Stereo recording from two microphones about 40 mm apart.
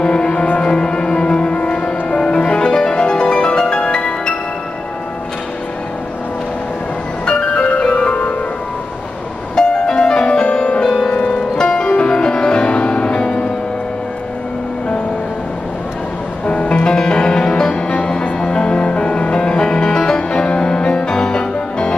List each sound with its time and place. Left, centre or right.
0.0 s music: left
7.2 s music: left
7.9 s music: left
9.6 s music: left
16.4 s music: left